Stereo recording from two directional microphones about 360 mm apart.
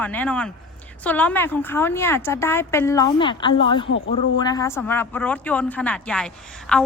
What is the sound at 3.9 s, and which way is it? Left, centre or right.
Speech, left.